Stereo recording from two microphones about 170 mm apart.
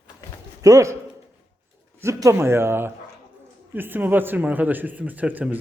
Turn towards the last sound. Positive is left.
turn(degrees=-10)  # may be behind; listen again after turning